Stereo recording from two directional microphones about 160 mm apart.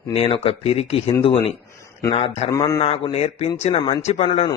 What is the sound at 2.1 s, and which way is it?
Speech, 40° left (ahead or behind).